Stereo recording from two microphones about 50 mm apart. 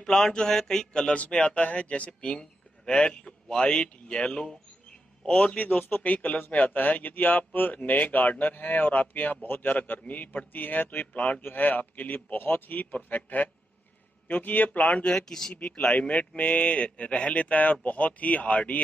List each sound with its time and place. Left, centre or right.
0.0 s a man's voice: centre
5.3 s speech: left
15.1 s a man's voice: centre
15.5 s speech: left